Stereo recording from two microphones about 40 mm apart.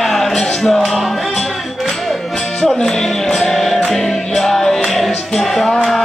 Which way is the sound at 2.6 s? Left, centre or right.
Centre.